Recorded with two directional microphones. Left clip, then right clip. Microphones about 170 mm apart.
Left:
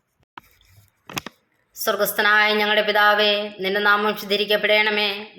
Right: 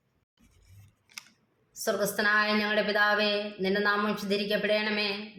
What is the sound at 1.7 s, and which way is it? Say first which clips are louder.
A woman's voice: left 8 dB; 20° left (ahead or behind).